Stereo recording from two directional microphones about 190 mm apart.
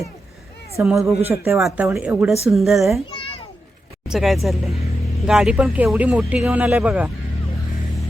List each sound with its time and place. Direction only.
0.8 s speech: centre (ahead or behind)
3.1 s children playing: 30° left (ahead or behind)
4.1 s speech: centre (ahead or behind)